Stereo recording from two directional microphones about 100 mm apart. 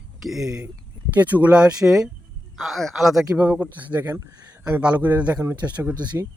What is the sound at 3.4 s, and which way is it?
Speech, 15° right (ahead or behind).